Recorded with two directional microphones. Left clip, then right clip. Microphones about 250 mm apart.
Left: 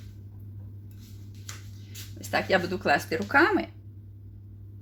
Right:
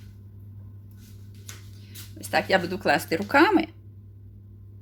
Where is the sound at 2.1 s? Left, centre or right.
Centre.